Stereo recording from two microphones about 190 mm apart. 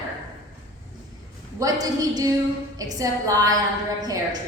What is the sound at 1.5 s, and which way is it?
A woman's voice, 20° right (ahead or behind).